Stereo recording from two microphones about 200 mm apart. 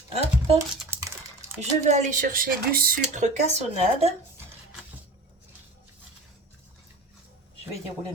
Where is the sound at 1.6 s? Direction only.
35° right (ahead or behind).